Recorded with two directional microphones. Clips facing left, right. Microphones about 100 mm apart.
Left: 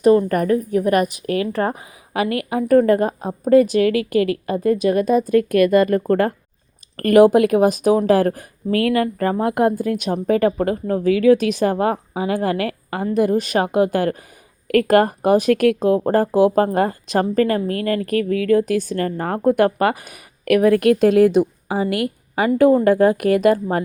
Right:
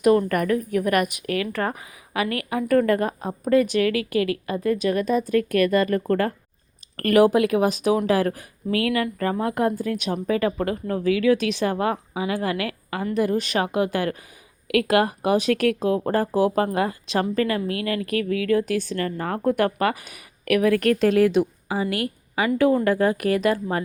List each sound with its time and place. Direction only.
0.0 s a woman's voice: 30° left (ahead or behind)
9.6 s a woman's voice: 45° left (ahead or behind)